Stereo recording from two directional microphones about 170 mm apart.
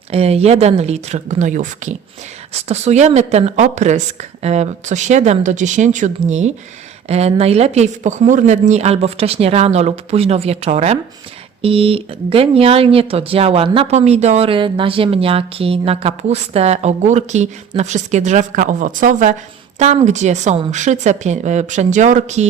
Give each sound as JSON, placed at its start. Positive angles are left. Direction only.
{"t": 0.1, "sound": "a woman's voice", "side_deg": -35}